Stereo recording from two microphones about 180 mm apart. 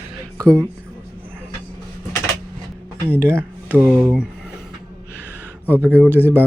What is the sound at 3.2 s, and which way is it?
Speech, 10° right (ahead or behind).